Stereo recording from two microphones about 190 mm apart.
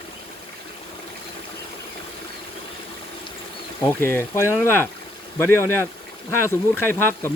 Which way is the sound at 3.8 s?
10° left (ahead or behind).